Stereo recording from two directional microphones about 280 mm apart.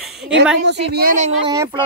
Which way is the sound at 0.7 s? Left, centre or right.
Right.